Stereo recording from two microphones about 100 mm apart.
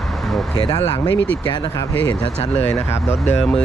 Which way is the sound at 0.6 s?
45° left (ahead or behind).